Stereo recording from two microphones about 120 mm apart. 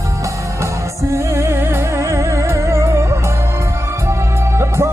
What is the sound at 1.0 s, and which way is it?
Music, 25° right (ahead or behind).